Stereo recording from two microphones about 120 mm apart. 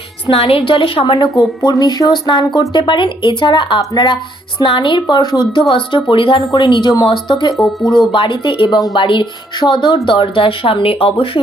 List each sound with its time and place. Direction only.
0.3 s speech: 50° left (ahead or behind)
1.6 s speech: 35° left (ahead or behind)
7.5 s speech: centre (ahead or behind)
8.1 s speech: 45° left (ahead or behind)